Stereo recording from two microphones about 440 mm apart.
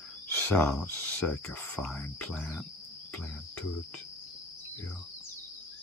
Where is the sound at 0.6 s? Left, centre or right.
Centre.